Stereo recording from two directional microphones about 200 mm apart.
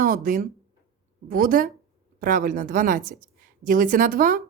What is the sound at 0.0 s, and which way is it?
A woman's voice, 45° right (ahead or behind).